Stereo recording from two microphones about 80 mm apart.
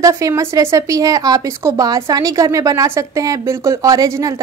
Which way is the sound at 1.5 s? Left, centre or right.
Right.